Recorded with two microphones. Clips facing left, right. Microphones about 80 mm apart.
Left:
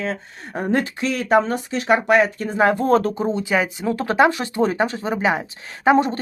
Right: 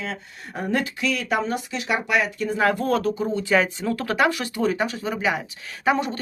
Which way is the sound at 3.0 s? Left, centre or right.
Left.